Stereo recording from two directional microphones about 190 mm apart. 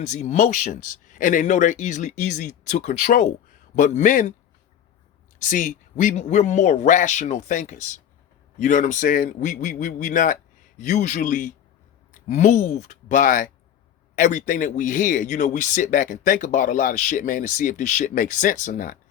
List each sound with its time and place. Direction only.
0.0 s speech: 40° left (ahead or behind)
5.4 s speech: 45° left (ahead or behind)